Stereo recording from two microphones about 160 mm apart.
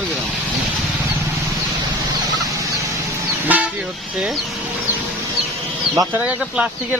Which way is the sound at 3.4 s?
10° right (ahead or behind).